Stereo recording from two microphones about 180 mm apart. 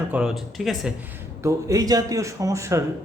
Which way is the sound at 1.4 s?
15° right (ahead or behind).